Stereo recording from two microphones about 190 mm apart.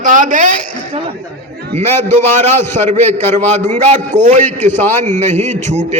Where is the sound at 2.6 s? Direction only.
10° left (ahead or behind).